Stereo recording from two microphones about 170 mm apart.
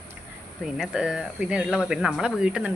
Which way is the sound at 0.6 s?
5° right (ahead or behind).